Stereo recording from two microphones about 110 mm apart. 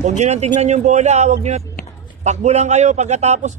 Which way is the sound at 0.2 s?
85° right.